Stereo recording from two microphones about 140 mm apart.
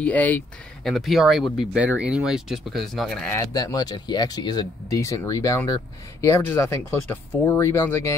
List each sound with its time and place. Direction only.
0.0 s speech: 10° left (ahead or behind)
0.8 s speech: centre (ahead or behind)
3.5 s speech: 25° left (ahead or behind)